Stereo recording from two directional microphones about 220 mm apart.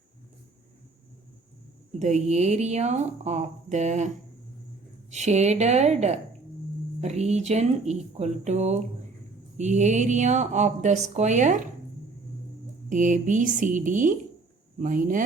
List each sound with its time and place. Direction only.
2.0 s speech: 30° right (ahead or behind)
5.1 s speech: 30° right (ahead or behind)
12.9 s speech: 35° right (ahead or behind)